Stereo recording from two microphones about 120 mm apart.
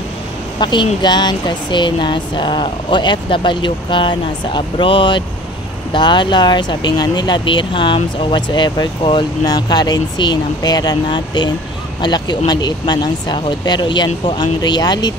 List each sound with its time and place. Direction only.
0.6 s a woman's voice: 40° left (ahead or behind)